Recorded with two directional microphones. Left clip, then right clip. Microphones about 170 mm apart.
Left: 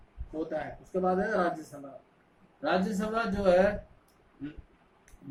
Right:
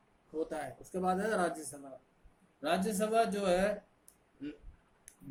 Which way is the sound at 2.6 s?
50° right (ahead or behind).